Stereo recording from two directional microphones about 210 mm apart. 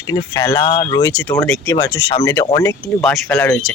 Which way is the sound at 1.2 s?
5° left (ahead or behind).